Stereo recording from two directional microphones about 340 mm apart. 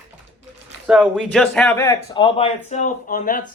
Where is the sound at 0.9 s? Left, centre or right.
Centre.